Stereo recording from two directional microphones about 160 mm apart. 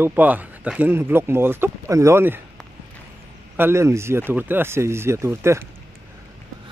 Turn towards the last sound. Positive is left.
turn(degrees=-15)  # may be behind; listen again after turning